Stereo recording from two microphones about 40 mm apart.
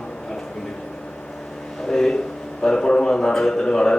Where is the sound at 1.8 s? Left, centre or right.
Centre.